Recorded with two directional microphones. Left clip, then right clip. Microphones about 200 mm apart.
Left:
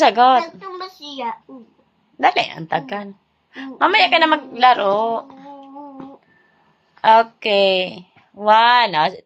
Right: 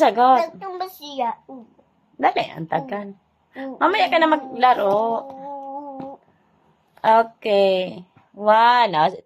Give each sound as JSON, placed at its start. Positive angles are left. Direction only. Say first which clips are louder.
{"t": 0.0, "sound": "a woman's voice", "louder": "left 2 dB", "side_deg": -5}
{"t": 0.6, "sound": "a sound", "louder": "right 2 dB", "side_deg": -60}
{"t": 2.1, "sound": "a woman's voice", "louder": "left 3 dB", "side_deg": -5}
{"t": 7.0, "sound": "speech", "louder": "left 3 dB", "side_deg": -10}